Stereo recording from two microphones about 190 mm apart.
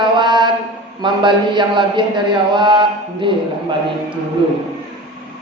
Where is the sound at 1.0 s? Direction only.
25° right (ahead or behind).